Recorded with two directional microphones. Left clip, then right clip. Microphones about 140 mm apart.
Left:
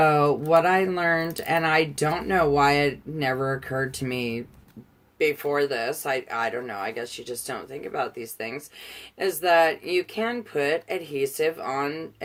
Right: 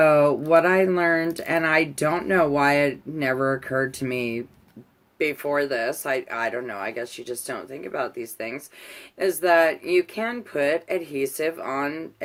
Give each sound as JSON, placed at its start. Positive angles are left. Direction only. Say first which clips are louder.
{"t": 0.0, "sound": "speech", "louder": "right 3 dB", "side_deg": -40}